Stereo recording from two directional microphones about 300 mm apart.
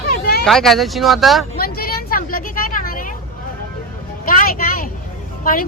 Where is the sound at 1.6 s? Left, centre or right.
Left.